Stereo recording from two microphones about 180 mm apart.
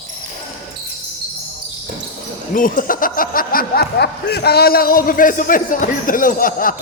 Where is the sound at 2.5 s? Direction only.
50° left (ahead or behind).